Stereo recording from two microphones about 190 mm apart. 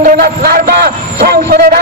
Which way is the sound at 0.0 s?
50° right (ahead or behind).